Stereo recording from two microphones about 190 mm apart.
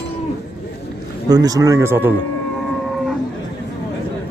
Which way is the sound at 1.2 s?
20° right (ahead or behind).